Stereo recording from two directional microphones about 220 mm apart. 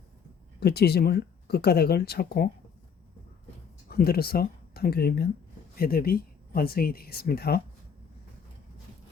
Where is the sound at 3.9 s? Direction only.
45° left (ahead or behind).